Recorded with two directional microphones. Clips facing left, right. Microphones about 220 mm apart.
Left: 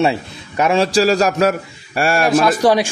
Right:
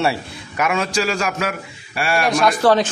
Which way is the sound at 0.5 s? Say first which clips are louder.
Left 6 dB; 30° left (ahead or behind).